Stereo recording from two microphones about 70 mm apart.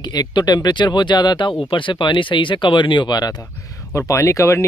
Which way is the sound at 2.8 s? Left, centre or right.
Left.